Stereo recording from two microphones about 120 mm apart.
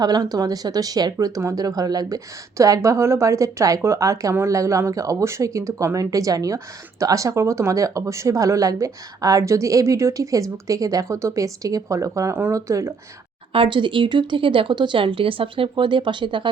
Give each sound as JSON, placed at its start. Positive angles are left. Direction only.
{"t": 0.0, "sound": "speech", "side_deg": -30}
{"t": 13.5, "sound": "speech", "side_deg": -45}